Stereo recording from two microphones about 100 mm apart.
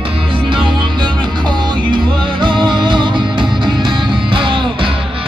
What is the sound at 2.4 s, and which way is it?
Music, 50° right (ahead or behind).